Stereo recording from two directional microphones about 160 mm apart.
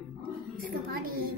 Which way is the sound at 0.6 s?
70° right (ahead or behind).